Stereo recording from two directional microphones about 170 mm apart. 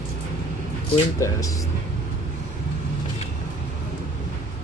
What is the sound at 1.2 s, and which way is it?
Speech, 20° left (ahead or behind).